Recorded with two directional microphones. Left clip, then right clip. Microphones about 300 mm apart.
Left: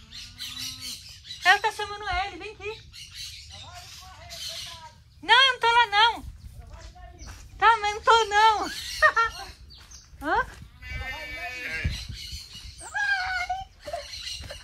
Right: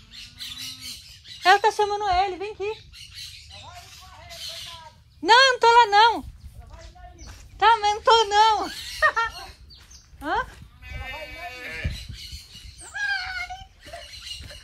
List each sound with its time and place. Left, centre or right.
1.4 s a woman's voice: centre
5.2 s a woman's voice: centre
7.2 s speech: centre
11.0 s sheep: centre
12.8 s screaming: centre